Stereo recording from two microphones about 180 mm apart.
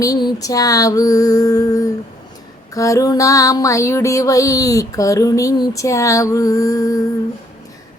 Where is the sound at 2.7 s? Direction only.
15° left (ahead or behind).